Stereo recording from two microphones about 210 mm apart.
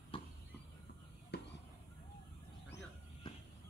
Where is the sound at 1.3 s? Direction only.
50° left (ahead or behind).